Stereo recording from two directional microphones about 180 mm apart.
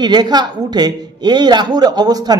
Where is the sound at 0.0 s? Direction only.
25° right (ahead or behind).